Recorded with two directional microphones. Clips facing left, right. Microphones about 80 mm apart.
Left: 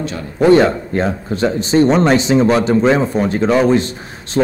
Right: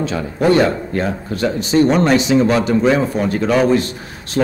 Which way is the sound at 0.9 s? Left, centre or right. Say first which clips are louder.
Left 2 dB; left.